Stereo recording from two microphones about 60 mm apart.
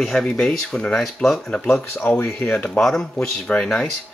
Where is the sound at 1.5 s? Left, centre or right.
Left.